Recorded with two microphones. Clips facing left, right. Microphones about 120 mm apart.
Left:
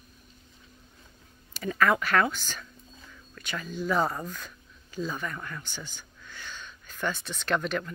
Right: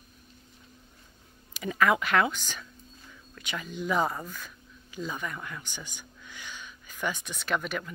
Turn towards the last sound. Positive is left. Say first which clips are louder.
# left 3 dB
turn(degrees=-5)  # may be behind; listen again after turning